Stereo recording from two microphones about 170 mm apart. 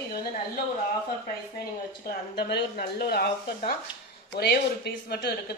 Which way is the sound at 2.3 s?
70° left (ahead or behind).